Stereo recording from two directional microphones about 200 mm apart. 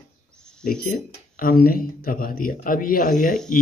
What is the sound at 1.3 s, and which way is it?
Speech, 45° left (ahead or behind).